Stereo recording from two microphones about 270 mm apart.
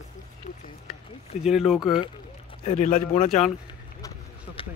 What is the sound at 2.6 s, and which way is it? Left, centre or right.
Speech, left.